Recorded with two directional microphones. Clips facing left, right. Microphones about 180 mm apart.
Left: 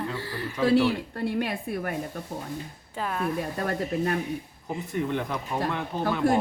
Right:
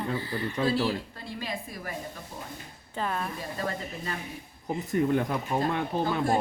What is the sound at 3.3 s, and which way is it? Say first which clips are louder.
Speech: left 5 dB; 60° left (ahead or behind).